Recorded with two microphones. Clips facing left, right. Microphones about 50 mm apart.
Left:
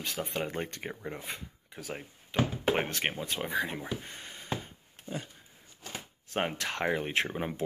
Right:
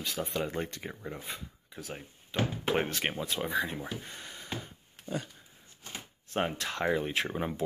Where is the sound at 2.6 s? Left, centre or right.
Left.